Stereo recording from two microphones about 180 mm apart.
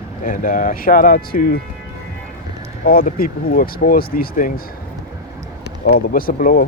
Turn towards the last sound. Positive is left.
turn(degrees=50)  # may be behind; listen again after turning